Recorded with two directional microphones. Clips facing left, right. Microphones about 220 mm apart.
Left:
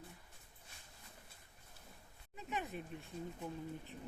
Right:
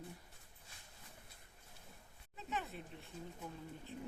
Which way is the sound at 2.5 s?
15° left (ahead or behind).